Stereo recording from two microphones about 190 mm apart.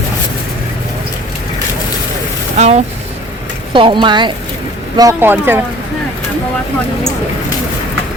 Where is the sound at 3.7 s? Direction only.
25° right (ahead or behind); by 5.6 s 10° right (ahead or behind).